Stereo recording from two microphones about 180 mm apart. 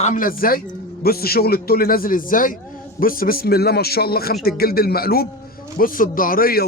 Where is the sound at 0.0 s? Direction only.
50° left (ahead or behind).